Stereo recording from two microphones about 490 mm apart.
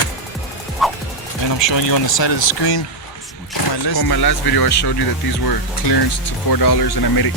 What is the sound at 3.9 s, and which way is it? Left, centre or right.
Speech, left.